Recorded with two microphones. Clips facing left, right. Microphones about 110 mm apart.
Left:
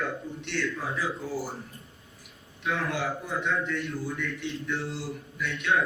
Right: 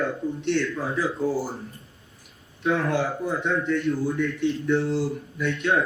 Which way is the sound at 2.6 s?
35° right (ahead or behind).